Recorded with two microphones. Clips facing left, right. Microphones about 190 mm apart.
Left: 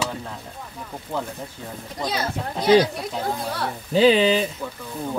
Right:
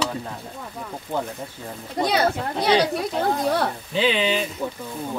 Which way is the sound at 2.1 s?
70° right (ahead or behind).